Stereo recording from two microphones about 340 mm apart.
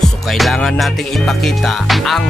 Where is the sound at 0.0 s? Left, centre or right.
Centre.